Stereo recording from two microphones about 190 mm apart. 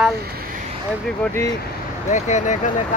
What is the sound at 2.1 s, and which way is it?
Speech, 40° left (ahead or behind).